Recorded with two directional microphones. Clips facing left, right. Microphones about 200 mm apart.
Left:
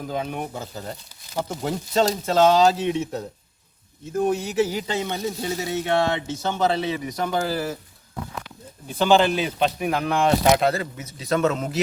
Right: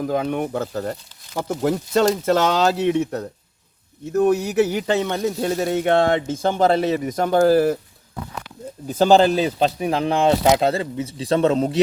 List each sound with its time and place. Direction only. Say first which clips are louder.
0.0 s a man's voice: right 6 dB; 65° right (ahead or behind)
8.9 s speech: right 4 dB; 40° right (ahead or behind)